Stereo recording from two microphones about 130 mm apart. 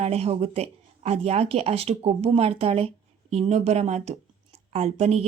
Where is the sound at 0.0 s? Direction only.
55° right (ahead or behind).